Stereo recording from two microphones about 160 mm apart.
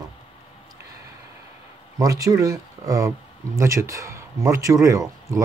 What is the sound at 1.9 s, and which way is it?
Speech, 20° right (ahead or behind).